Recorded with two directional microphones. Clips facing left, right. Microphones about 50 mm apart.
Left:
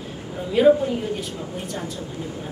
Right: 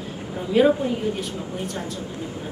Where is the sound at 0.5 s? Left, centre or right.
Centre.